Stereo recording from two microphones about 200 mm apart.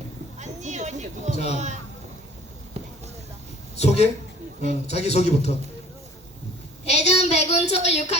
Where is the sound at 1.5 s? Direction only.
35° right (ahead or behind).